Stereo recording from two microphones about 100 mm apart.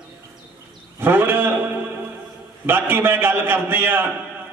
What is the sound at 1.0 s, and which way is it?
A man's voice, 20° right (ahead or behind).